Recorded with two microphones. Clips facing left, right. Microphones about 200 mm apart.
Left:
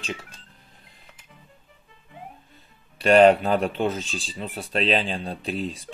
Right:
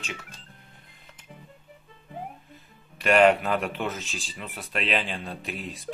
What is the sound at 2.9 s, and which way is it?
Speech, 30° left (ahead or behind).